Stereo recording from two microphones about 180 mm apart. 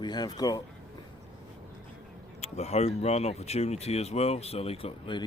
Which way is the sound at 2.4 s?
40° left (ahead or behind).